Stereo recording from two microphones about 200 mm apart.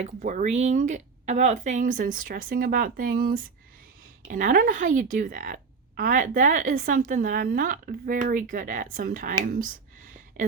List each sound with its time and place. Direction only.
0.2 s speech: 40° right (ahead or behind)